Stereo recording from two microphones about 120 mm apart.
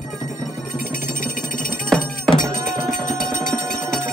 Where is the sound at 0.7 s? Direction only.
90° left.